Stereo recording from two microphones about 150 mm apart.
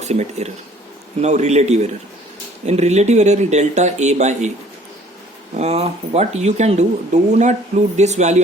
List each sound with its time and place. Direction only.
0.0 s speech: 50° right (ahead or behind)
5.5 s speech: 45° right (ahead or behind)